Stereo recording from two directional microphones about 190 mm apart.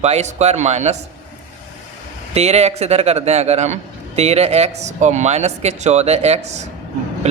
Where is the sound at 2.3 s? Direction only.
35° right (ahead or behind).